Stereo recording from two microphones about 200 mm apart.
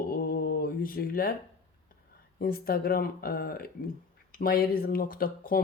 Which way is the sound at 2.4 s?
50° left (ahead or behind).